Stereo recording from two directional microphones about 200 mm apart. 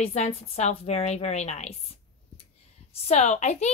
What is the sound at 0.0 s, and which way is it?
A woman's voice, 30° left (ahead or behind).